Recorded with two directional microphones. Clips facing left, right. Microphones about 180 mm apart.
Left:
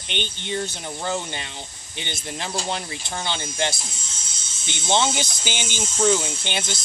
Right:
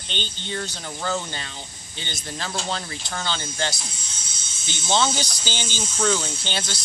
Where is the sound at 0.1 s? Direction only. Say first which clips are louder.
Left 3 dB; 15° left (ahead or behind).